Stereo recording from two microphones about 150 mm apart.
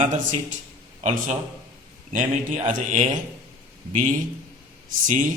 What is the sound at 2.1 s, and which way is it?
A man's voice, 60° right (ahead or behind).